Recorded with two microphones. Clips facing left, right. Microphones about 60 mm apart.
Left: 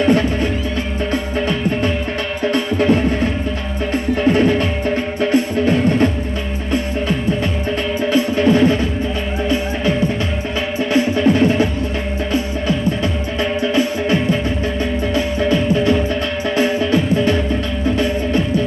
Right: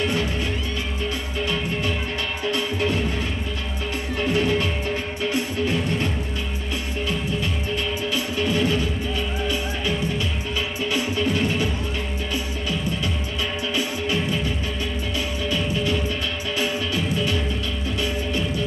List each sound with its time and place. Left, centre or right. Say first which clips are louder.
0.0 s music: left 9 dB; left
8.1 s music: left 12 dB; left
11.2 s music: left 9 dB; left
13.7 s music: left 7 dB; left